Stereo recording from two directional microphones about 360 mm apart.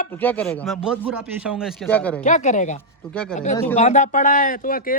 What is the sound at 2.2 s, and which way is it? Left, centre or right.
Speech, left.